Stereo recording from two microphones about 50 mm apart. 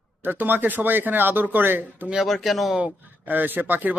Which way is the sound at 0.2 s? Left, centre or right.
Right.